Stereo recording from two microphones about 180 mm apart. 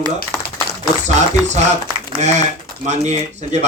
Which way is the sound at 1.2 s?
40° right (ahead or behind).